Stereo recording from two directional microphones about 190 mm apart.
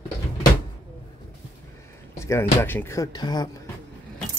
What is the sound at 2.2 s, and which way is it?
Speech, 15° left (ahead or behind).